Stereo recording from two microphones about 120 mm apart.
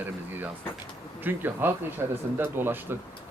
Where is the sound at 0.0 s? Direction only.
15° right (ahead or behind).